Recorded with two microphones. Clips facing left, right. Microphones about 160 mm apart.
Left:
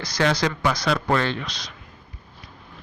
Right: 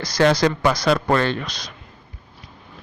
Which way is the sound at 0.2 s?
40° right (ahead or behind).